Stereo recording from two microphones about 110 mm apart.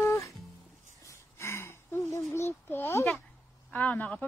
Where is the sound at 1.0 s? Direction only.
25° left (ahead or behind).